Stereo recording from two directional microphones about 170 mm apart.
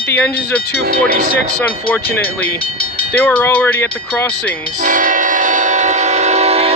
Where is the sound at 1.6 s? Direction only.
10° left (ahead or behind).